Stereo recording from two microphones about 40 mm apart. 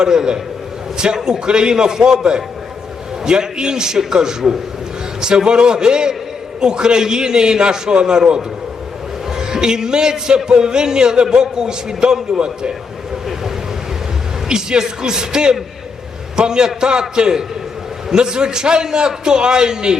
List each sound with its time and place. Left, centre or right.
0.0 s a man's voice: centre
5.2 s music: centre
14.4 s a man's voice: centre
16.3 s music: centre